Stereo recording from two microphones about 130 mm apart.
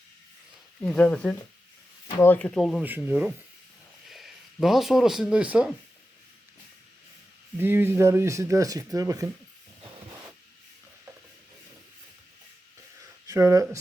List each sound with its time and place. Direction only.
0.8 s speech: 10° left (ahead or behind)
2.5 s speech: centre (ahead or behind)
2.8 s speech: 15° right (ahead or behind)
4.1 s speech: centre (ahead or behind)
7.6 s speech: 15° right (ahead or behind)
13.0 s a sound: 25° right (ahead or behind)